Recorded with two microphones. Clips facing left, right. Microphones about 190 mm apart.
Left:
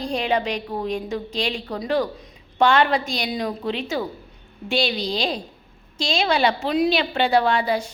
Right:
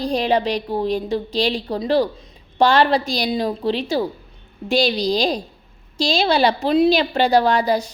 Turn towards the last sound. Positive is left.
turn(degrees=-40)  # may be behind; listen again after turning